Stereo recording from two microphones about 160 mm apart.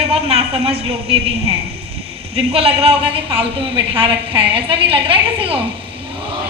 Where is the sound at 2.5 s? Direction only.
35° right (ahead or behind).